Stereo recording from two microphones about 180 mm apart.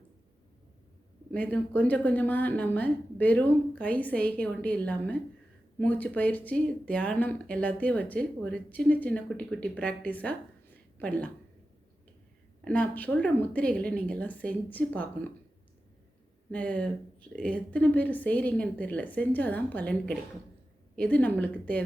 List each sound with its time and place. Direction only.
1.3 s speech: 10° left (ahead or behind)
12.6 s speech: 5° left (ahead or behind)
16.5 s speech: 5° left (ahead or behind)